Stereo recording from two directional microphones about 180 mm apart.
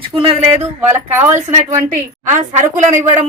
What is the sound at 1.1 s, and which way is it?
Speech, 10° right (ahead or behind).